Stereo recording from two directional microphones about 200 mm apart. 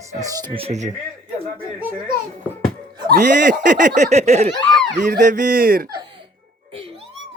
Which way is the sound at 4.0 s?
35° right (ahead or behind).